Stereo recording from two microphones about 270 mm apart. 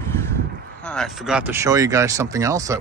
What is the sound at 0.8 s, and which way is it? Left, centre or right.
A man's voice, centre.